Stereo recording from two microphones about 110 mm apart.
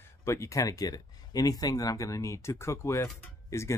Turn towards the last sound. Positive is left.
turn(degrees=30)  # may be behind; listen again after turning